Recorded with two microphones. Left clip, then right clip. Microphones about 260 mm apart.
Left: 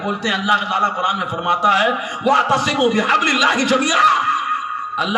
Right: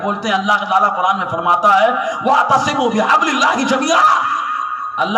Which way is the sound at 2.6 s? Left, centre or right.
Left.